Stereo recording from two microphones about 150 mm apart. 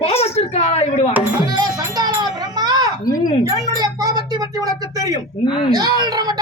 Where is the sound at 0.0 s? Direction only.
40° left (ahead or behind).